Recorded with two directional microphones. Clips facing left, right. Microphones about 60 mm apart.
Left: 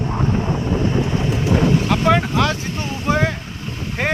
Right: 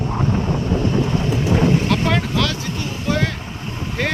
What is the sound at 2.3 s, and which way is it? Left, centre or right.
Speech, left.